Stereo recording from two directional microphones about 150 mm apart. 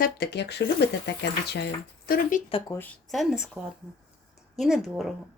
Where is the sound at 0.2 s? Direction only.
90° left.